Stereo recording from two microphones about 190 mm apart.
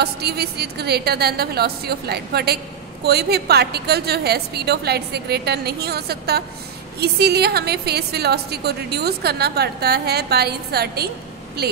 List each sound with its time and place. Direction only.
0.0 s a woman's voice: 60° right (ahead or behind)